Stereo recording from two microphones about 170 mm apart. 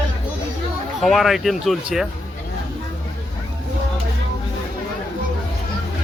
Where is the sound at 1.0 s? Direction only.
Centre (ahead or behind).